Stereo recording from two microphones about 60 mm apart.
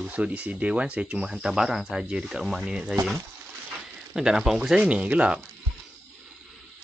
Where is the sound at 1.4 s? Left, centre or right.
Centre.